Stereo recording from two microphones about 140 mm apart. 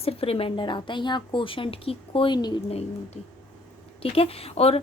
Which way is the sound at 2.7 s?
45° left (ahead or behind).